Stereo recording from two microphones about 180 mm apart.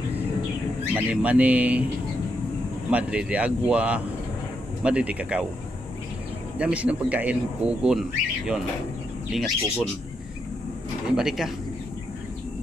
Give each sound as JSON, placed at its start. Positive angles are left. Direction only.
{"t": 0.9, "sound": "speech", "side_deg": -10}
{"t": 2.9, "sound": "speech", "side_deg": -5}
{"t": 6.6, "sound": "speech", "side_deg": -5}
{"t": 9.3, "sound": "speech", "side_deg": 0}
{"t": 11.1, "sound": "speech", "side_deg": 0}